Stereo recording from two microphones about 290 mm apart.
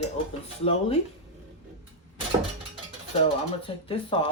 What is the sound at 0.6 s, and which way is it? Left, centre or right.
Speech, left.